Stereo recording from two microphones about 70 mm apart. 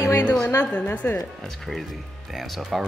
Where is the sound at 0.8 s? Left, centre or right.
Left.